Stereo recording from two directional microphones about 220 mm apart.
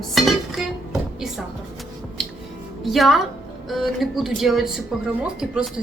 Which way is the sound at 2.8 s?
Centre (ahead or behind).